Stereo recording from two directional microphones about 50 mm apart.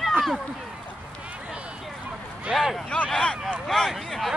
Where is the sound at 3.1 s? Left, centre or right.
Centre.